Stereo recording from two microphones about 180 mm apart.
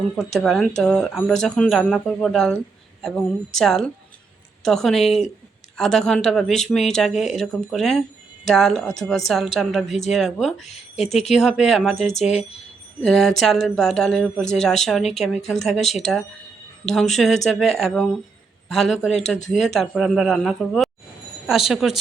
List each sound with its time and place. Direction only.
0.3 s speech: centre (ahead or behind)
10.7 s speech: 35° left (ahead or behind)
11.3 s speech: centre (ahead or behind)
12.1 s speech: 40° left (ahead or behind)
13.1 s speech: centre (ahead or behind)
16.9 s speech: centre (ahead or behind)